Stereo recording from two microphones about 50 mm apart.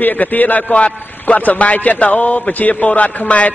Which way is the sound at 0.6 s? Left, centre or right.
Left.